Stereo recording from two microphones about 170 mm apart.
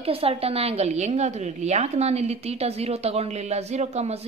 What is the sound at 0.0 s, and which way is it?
A woman's voice, 35° right (ahead or behind).